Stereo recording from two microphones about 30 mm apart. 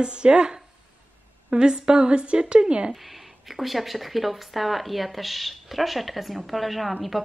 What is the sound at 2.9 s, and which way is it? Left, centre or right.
Speech, centre.